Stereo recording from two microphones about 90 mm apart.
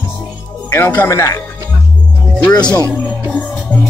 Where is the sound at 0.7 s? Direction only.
25° left (ahead or behind).